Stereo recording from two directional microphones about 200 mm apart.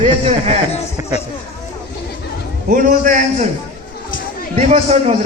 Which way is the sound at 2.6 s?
40° right (ahead or behind).